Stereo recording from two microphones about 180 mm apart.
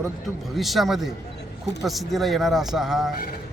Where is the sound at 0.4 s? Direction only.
Centre (ahead or behind).